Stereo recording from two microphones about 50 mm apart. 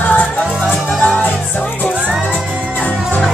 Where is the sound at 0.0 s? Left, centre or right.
Left.